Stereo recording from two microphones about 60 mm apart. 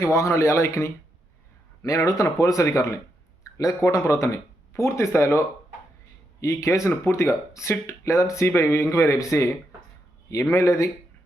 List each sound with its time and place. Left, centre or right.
0.0 s speech: left